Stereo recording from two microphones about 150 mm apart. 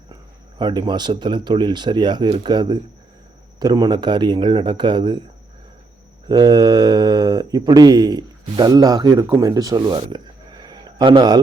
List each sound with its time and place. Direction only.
0.6 s speech: 30° right (ahead or behind)
6.2 s speech: 25° right (ahead or behind)